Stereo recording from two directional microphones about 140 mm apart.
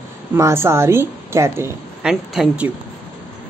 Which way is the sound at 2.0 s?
5° right (ahead or behind).